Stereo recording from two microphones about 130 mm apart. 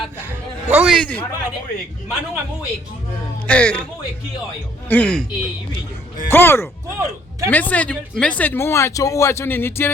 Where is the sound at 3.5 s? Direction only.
10° left (ahead or behind).